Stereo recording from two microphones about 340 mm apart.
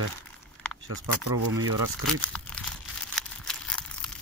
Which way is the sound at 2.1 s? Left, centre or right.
Centre.